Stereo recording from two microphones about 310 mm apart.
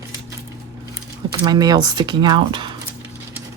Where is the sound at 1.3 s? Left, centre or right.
Centre.